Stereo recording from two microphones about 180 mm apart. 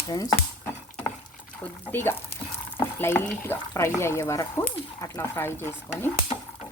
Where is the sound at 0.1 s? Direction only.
20° left (ahead or behind).